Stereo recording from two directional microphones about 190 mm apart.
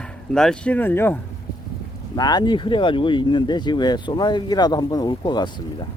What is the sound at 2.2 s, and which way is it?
Speech, 20° left (ahead or behind).